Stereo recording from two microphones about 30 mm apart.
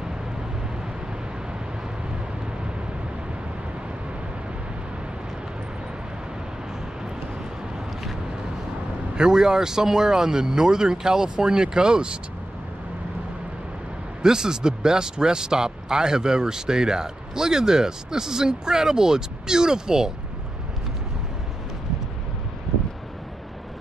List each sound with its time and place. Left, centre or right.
9.1 s speech: right
14.2 s speech: right